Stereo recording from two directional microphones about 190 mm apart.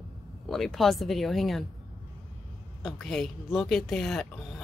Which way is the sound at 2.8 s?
Centre (ahead or behind).